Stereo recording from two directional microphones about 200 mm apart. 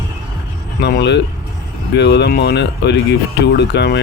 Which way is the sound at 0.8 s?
55° left (ahead or behind).